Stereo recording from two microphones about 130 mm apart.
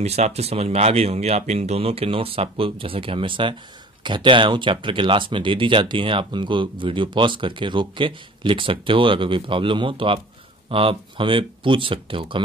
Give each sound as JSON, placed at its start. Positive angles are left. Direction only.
{"t": 0.0, "sound": "speech", "side_deg": -55}